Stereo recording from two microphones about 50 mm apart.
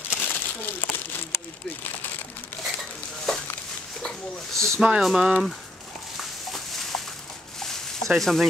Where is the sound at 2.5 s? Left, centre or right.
Left.